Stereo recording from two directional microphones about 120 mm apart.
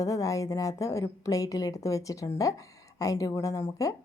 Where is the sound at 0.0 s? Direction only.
25° left (ahead or behind).